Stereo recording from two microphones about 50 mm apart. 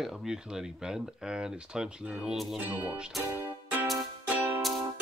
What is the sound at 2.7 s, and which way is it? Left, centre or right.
Speech, right.